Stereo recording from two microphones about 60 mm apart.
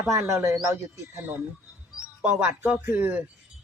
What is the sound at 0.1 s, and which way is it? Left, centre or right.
Speech, right.